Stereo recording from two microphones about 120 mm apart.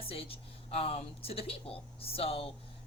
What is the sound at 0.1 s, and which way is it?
Speech, 50° left (ahead or behind).